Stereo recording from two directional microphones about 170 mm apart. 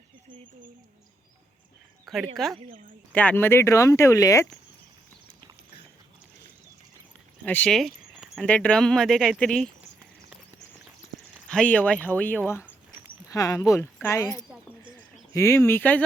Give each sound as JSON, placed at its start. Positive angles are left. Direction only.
{"t": 2.0, "sound": "speech", "side_deg": 0}
{"t": 7.4, "sound": "a sound", "side_deg": 10}
{"t": 8.4, "sound": "speech", "side_deg": 5}
{"t": 11.4, "sound": "speech", "side_deg": 5}
{"t": 14.8, "sound": "bird", "side_deg": 15}